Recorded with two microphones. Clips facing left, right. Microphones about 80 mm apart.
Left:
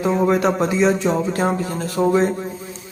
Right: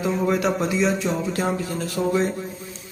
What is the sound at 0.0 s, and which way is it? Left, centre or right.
A man's voice, left.